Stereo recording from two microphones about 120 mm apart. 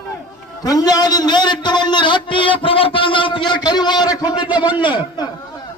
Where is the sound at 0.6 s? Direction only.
30° left (ahead or behind).